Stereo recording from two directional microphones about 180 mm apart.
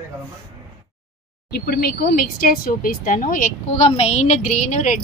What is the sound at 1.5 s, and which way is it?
Speech, 55° left (ahead or behind).